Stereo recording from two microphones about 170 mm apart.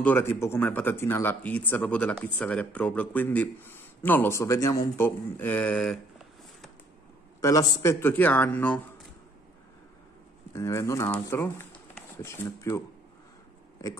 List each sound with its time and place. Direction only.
0.0 s speech: 10° left (ahead or behind)
7.3 s speech: 20° left (ahead or behind)
10.5 s speech: 20° left (ahead or behind)